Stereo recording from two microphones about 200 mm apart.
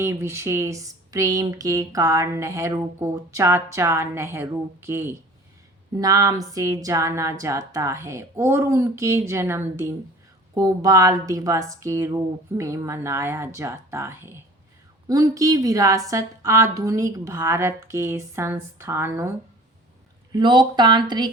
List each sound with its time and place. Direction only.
0.0 s speech: 10° right (ahead or behind)
20.3 s speech: 20° right (ahead or behind)